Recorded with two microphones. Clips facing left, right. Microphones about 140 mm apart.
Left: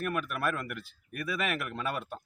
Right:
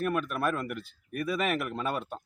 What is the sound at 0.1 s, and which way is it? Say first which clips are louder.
Speech: right 3 dB; 5° left (ahead or behind).